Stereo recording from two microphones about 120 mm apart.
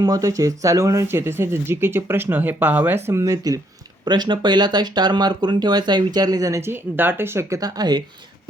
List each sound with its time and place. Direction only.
0.0 s speech: 30° right (ahead or behind)